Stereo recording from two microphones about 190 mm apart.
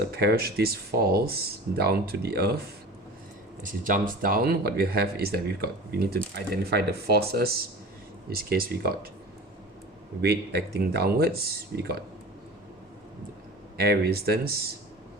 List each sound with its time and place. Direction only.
0.2 s speech: 55° right (ahead or behind)
3.6 s speech: 45° right (ahead or behind)
10.2 s speech: 55° right (ahead or behind)
13.7 s speech: 55° right (ahead or behind)